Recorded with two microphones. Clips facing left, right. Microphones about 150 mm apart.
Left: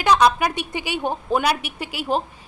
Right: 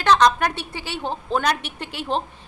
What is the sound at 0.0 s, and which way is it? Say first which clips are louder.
A woman's voice: even; 10° left (ahead or behind).